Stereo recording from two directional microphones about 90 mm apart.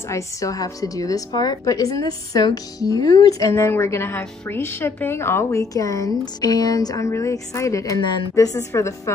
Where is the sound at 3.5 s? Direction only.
25° left (ahead or behind).